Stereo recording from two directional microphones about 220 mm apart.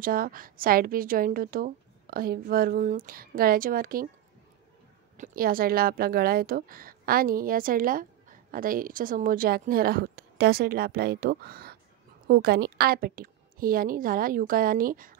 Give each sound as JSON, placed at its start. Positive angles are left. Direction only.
{"t": 0.0, "sound": "a woman's voice", "side_deg": -40}
{"t": 5.1, "sound": "a woman's voice", "side_deg": -35}